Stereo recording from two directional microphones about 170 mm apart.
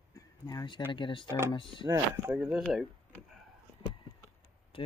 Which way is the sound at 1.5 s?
30° left (ahead or behind).